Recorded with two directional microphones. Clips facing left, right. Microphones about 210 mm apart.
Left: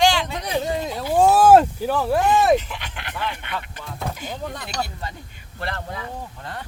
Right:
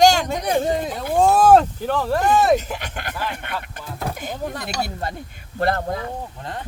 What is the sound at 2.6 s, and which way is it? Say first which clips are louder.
Speech: right 5 dB; 45° right (ahead or behind).